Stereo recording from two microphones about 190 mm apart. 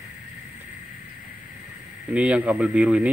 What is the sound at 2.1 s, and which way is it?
Speech, 5° right (ahead or behind).